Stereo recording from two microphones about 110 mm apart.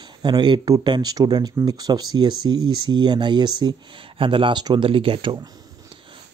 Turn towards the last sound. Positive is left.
turn(degrees=-55)  # may be behind; listen again after turning